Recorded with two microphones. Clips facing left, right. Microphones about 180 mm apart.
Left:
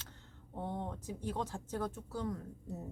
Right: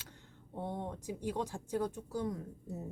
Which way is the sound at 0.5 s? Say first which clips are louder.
Right 1 dB; 15° right (ahead or behind).